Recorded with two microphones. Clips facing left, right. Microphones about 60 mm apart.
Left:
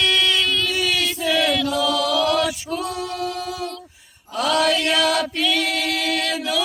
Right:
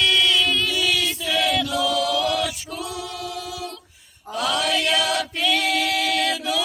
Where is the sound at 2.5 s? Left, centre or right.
Left.